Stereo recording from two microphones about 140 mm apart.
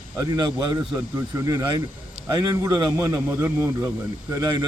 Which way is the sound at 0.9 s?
20° right (ahead or behind).